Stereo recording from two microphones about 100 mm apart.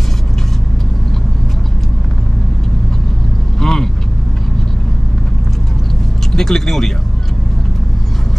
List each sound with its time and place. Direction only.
3.6 s vehicle: 5° left (ahead or behind)
6.3 s speech: 5° left (ahead or behind)